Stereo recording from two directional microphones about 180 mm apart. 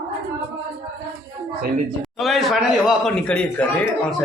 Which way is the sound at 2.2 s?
Centre (ahead or behind).